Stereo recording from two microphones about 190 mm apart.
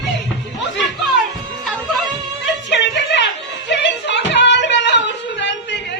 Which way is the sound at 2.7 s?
65° left (ahead or behind).